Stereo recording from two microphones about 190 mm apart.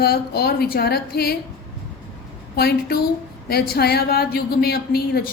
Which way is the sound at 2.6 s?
55° left (ahead or behind).